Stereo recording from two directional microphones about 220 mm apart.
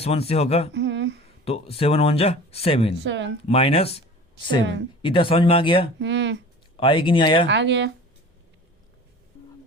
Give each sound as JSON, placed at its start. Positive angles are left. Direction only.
{"t": 0.0, "sound": "speech", "side_deg": 25}
{"t": 0.7, "sound": "a sound", "side_deg": -55}
{"t": 1.5, "sound": "speech", "side_deg": 25}
{"t": 2.9, "sound": "speech", "side_deg": -55}
{"t": 3.4, "sound": "speech", "side_deg": 25}
{"t": 5.0, "sound": "speech", "side_deg": 25}
{"t": 6.0, "sound": "speech", "side_deg": -55}
{"t": 6.7, "sound": "speech", "side_deg": 25}
{"t": 7.4, "sound": "speech", "side_deg": -55}